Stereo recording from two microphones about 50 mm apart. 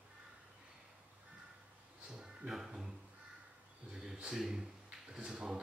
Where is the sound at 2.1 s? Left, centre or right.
Centre.